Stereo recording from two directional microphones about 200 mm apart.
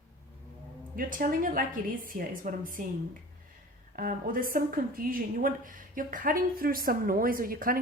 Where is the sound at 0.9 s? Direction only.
45° right (ahead or behind).